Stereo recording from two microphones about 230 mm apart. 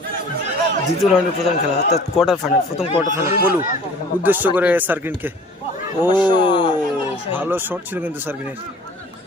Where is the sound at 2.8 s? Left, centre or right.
Left.